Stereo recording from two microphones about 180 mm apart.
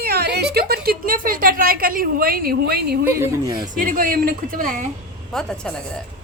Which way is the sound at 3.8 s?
50° right (ahead or behind).